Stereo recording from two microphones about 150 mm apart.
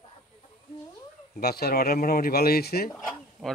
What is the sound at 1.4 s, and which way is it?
Speech, 90° left.